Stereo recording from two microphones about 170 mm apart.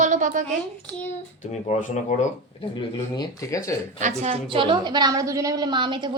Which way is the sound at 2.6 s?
25° left (ahead or behind).